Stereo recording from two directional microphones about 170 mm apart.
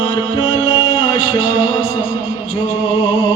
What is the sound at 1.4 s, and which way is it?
Music, 45° left (ahead or behind).